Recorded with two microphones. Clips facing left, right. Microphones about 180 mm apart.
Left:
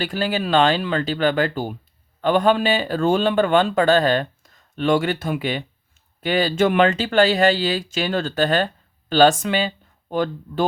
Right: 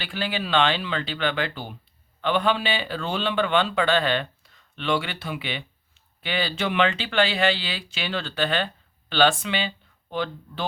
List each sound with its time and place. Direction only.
0.0 s speech: 40° left (ahead or behind)